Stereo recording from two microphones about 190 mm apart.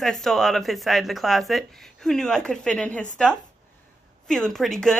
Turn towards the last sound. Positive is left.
turn(degrees=5)  # may be behind; listen again after turning